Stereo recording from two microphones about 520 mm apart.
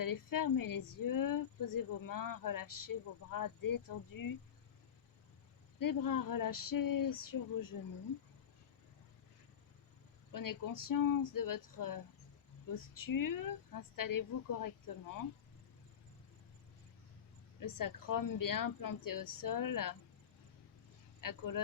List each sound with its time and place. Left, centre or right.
0.0 s speech: left
5.8 s speech: left
10.3 s speech: left
17.6 s speech: left
21.2 s speech: left